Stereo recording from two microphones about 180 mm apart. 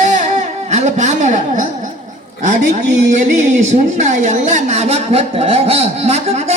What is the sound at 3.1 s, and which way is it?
A woman's voice, 40° right (ahead or behind).